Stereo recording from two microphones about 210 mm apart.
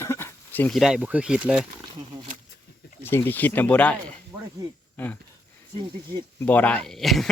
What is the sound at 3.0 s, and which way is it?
Speech, 10° left (ahead or behind).